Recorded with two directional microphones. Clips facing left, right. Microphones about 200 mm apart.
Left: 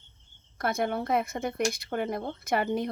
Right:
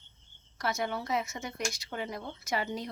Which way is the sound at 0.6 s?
55° left (ahead or behind).